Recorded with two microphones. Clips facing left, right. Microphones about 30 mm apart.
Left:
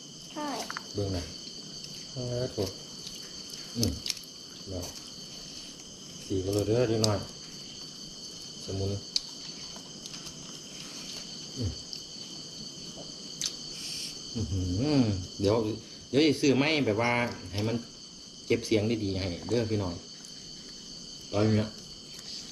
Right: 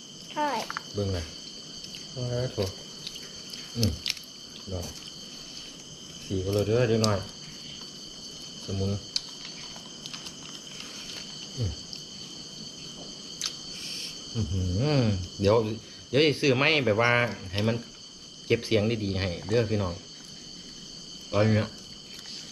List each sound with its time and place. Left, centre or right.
0.5 s speech: centre
2.2 s speech: right
3.8 s speech: right
6.2 s speech: centre
8.6 s speech: centre
10.8 s wild animals: right
13.4 s a sound: centre
14.3 s speech: centre
21.2 s speech: right